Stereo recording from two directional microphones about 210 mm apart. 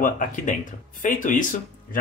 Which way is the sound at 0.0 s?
40° left (ahead or behind).